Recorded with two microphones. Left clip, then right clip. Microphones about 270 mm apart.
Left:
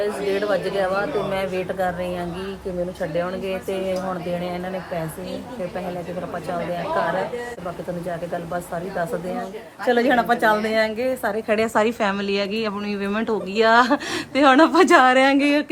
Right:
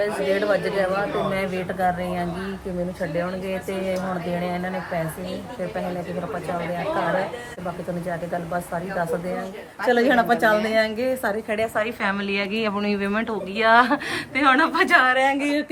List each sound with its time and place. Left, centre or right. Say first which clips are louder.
0.0 s speech: right 1 dB; centre
9.8 s speech: even; centre
11.4 s a woman's voice: left 3 dB; left
11.8 s a woman's voice: left 3 dB; centre
15.1 s a woman's voice: left 3 dB; left